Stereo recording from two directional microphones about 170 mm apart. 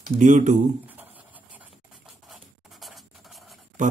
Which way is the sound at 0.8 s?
10° right (ahead or behind).